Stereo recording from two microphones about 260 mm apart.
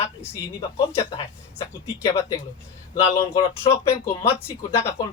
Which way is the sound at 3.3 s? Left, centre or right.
Left.